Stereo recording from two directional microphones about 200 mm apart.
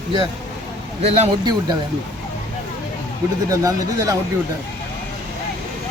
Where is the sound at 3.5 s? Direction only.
15° right (ahead or behind).